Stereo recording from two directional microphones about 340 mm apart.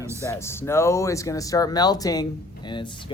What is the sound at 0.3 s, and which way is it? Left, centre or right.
Speech, centre.